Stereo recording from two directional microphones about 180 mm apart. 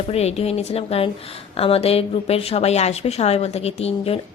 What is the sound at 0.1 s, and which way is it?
A woman's voice, 35° left (ahead or behind).